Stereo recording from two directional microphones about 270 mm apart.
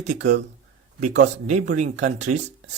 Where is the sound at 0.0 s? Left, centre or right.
Right.